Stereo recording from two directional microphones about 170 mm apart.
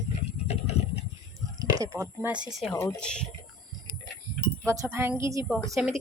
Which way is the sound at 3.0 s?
5° left (ahead or behind).